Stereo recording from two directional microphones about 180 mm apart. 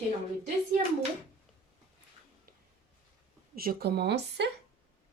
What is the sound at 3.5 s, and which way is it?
Speech, 55° right (ahead or behind).